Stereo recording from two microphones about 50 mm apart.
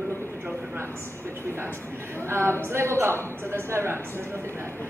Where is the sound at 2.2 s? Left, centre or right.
Right.